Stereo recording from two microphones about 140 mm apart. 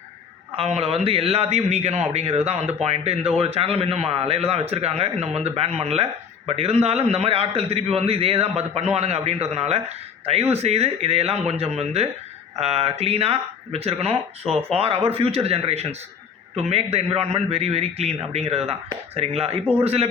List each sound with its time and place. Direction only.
0.5 s a man's voice: 45° right (ahead or behind)